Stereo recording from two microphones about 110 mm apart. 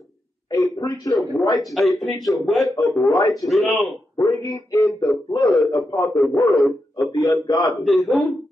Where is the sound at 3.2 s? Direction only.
40° left (ahead or behind).